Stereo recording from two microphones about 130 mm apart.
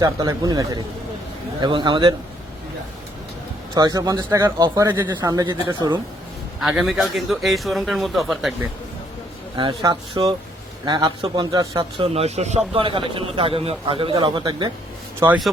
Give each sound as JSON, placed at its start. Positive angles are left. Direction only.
{"t": 0.0, "sound": "a man's voice", "side_deg": -30}
{"t": 3.8, "sound": "a man's voice", "side_deg": -30}
{"t": 5.1, "sound": "a man's voice", "side_deg": -30}
{"t": 6.6, "sound": "a man's voice", "side_deg": 0}
{"t": 9.6, "sound": "a man's voice", "side_deg": -35}
{"t": 11.9, "sound": "speech", "side_deg": -50}